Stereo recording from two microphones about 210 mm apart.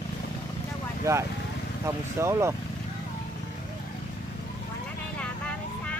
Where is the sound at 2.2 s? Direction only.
15° right (ahead or behind).